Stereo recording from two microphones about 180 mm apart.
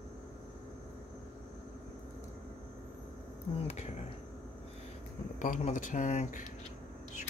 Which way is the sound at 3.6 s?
35° left (ahead or behind).